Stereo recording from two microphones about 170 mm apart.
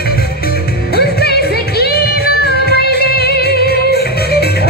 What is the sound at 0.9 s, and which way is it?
Music, 65° left (ahead or behind).